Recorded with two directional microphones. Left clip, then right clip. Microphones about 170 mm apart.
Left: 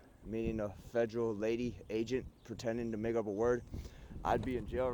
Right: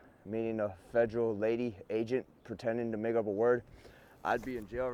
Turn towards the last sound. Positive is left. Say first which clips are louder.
# even
turn(degrees=35)  # may be behind; listen again after turning